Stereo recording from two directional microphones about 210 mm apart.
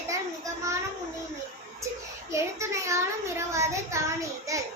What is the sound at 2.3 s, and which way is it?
A child's voice, 15° right (ahead or behind).